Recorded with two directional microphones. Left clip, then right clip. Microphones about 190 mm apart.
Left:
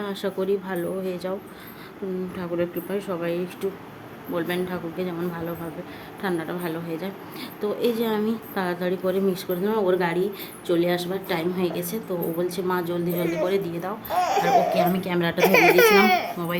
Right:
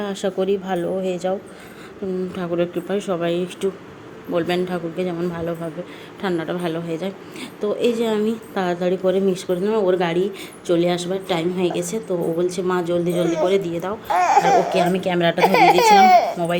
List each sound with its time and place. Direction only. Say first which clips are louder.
0.0 s speech: right 5 dB; 15° right (ahead or behind)
2.3 s speech: right 4 dB; 15° right (ahead or behind)